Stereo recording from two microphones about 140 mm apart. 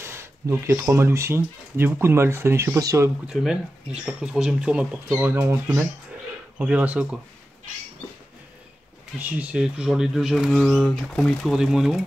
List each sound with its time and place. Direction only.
0.0 s speech: 20° right (ahead or behind)
3.3 s speech: 5° right (ahead or behind)
9.2 s speech: 10° right (ahead or behind)